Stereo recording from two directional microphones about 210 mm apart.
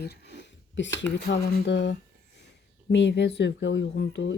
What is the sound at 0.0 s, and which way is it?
Speech, 55° left (ahead or behind).